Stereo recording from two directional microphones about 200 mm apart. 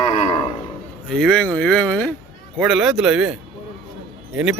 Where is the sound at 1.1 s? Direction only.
5° left (ahead or behind).